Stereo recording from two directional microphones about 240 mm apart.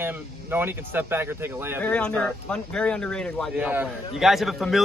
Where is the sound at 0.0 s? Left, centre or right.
Centre.